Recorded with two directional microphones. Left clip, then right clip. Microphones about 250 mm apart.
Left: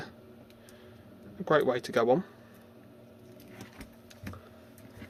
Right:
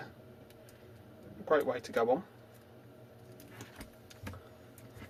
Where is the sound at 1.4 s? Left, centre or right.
Left.